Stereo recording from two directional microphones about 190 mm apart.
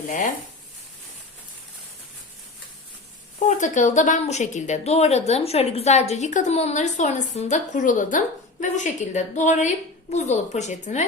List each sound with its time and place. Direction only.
0.1 s speech: 40° left (ahead or behind)
3.4 s speech: 40° left (ahead or behind)